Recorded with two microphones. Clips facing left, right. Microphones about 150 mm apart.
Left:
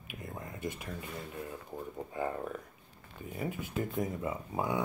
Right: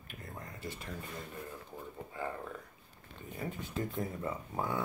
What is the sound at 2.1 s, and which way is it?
Speech, 20° left (ahead or behind).